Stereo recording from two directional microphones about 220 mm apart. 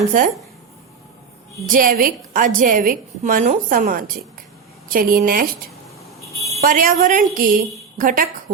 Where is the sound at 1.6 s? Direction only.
40° right (ahead or behind).